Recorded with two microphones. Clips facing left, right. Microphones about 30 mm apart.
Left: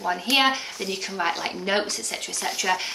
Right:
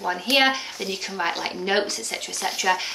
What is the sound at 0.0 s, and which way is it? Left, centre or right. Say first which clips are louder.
Speech: right 1 dB; centre.